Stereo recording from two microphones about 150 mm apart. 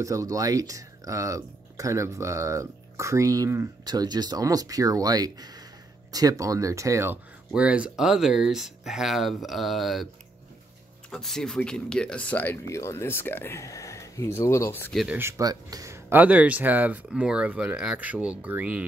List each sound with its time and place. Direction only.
0.0 s speech: 20° right (ahead or behind)
7.5 s speech: 10° right (ahead or behind)
11.1 s speech: 5° left (ahead or behind)
15.1 s speech: 20° right (ahead or behind)